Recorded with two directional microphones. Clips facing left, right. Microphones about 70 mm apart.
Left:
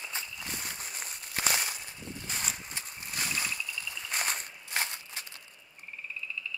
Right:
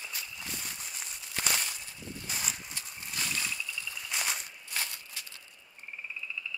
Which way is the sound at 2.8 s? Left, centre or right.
Left.